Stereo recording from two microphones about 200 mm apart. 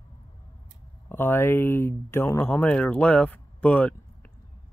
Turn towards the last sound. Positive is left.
turn(degrees=5)  # may be behind; listen again after turning